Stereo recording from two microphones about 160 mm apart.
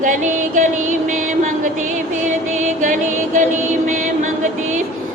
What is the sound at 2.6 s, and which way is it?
Music, 55° right (ahead or behind).